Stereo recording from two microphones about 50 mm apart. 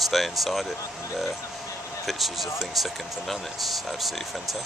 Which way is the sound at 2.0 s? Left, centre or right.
Centre.